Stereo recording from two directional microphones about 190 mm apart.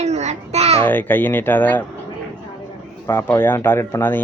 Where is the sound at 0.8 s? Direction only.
10° left (ahead or behind).